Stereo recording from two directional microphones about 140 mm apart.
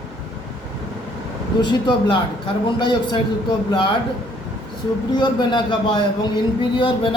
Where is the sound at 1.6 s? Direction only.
35° left (ahead or behind).